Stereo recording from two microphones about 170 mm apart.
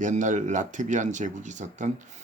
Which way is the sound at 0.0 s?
50° right (ahead or behind).